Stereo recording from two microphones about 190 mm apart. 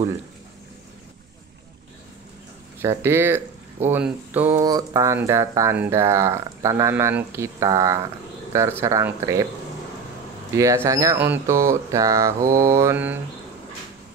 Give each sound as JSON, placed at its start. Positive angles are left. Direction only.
{"t": 2.8, "sound": "speech", "side_deg": -15}
{"t": 10.5, "sound": "speech", "side_deg": -15}